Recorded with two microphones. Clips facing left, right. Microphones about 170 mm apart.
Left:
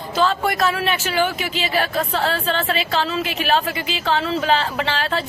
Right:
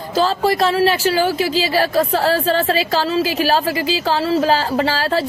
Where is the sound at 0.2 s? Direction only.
35° right (ahead or behind).